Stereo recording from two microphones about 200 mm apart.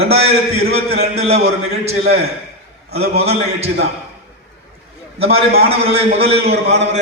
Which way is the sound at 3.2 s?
30° right (ahead or behind).